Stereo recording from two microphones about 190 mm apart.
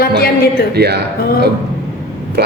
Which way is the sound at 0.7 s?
60° right (ahead or behind).